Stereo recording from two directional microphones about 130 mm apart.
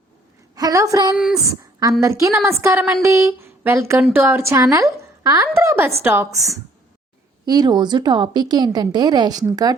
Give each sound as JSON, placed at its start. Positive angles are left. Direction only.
{"t": 0.5, "sound": "a woman's voice", "side_deg": -25}